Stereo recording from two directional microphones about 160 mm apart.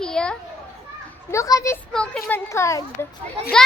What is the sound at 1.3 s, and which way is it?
Speech, 20° left (ahead or behind).